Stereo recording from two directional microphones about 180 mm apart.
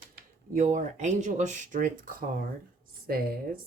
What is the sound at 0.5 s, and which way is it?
Speech, 40° right (ahead or behind).